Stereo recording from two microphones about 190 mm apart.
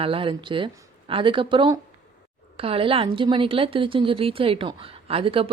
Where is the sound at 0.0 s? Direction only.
30° right (ahead or behind).